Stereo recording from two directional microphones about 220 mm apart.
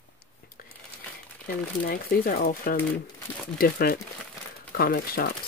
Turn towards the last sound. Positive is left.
turn(degrees=40)  # may be behind; listen again after turning